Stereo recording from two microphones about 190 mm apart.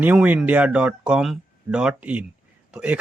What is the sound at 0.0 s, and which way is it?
A man's voice, 5° right (ahead or behind).